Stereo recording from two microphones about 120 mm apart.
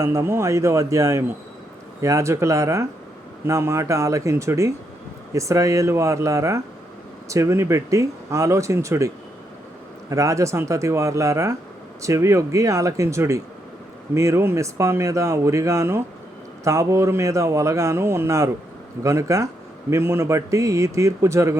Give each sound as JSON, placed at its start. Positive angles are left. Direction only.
{"t": 0.0, "sound": "speech", "side_deg": -25}